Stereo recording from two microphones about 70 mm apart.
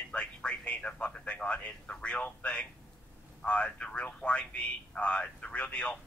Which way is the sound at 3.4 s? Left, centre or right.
Centre.